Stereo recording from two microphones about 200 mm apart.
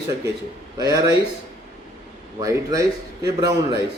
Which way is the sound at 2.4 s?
15° right (ahead or behind).